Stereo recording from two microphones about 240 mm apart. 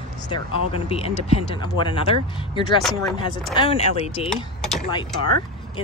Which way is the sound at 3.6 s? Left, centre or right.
Left.